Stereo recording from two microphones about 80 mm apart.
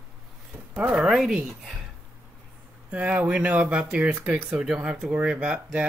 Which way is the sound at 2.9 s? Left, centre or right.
Centre.